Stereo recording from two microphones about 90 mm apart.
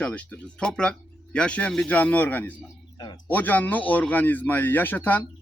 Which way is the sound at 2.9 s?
50° left (ahead or behind).